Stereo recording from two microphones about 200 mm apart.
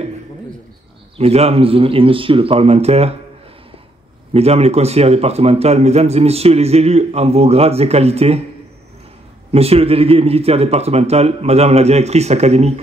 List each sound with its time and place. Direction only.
1.1 s speech: 30° right (ahead or behind)
4.3 s a man's voice: 30° right (ahead or behind)
9.5 s a man's voice: 30° right (ahead or behind)